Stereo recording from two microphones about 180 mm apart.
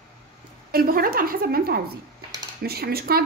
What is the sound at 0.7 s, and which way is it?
A woman's voice, 55° right (ahead or behind).